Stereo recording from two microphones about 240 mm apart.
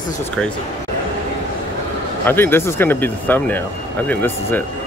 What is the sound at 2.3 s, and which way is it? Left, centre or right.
Speech, centre.